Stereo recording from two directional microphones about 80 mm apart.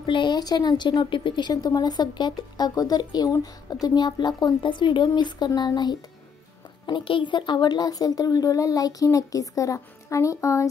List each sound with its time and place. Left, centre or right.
0.0 s a woman's voice: left
3.3 s speech: left
3.9 s a woman's voice: left
6.9 s speech: left